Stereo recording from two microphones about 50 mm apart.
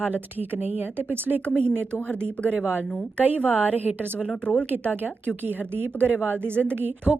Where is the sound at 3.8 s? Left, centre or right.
Right.